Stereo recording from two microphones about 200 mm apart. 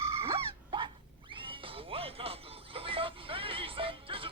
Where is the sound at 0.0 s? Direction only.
30° right (ahead or behind).